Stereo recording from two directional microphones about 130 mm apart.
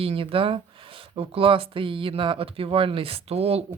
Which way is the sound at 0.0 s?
45° right (ahead or behind).